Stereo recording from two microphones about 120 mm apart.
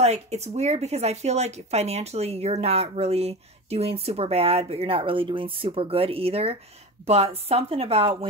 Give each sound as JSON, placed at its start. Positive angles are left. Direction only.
{"t": 0.0, "sound": "speech", "side_deg": -65}